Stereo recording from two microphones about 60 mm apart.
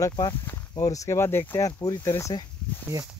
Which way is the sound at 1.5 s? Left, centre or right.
Left.